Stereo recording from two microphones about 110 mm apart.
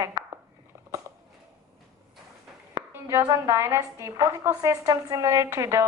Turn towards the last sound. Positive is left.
turn(degrees=-30)  # may be behind; listen again after turning